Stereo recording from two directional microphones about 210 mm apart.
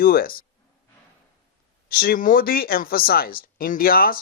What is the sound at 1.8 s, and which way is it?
Speech, 45° left (ahead or behind).